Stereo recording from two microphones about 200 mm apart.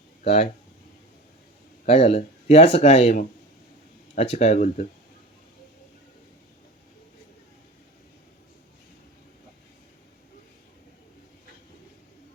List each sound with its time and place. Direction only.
1.8 s speech: 30° left (ahead or behind)